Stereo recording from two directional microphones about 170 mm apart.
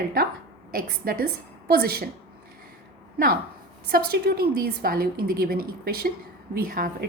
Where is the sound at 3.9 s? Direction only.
65° right (ahead or behind).